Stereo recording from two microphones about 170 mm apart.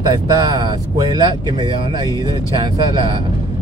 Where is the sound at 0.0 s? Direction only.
20° right (ahead or behind).